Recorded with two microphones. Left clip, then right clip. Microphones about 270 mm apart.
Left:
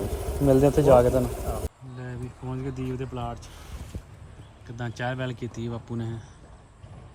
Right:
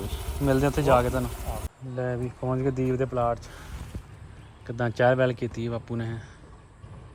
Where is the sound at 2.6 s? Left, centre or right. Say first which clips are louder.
Right 7 dB; centre.